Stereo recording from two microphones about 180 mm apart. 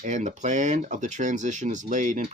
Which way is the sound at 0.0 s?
45° right (ahead or behind).